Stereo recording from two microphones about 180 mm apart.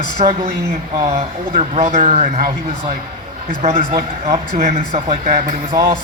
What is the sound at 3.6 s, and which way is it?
Speech, 35° right (ahead or behind).